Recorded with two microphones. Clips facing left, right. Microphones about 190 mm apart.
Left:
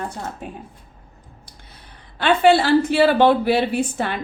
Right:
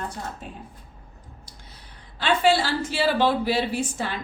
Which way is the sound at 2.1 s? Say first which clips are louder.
Left 6 dB; 60° left (ahead or behind).